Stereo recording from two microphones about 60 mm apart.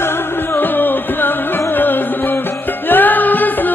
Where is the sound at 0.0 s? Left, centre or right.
Left.